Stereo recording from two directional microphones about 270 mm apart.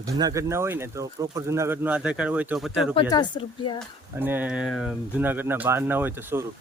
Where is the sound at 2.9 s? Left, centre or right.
Centre.